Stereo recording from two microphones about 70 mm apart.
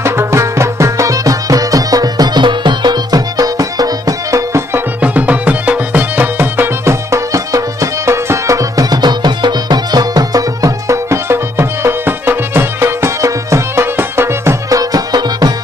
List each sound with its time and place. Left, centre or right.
0.0 s music: right
5.0 s music: right
6.8 s music: right
9.0 s music: right
14.7 s music: right